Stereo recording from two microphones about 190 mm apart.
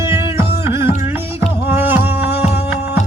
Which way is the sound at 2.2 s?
30° left (ahead or behind).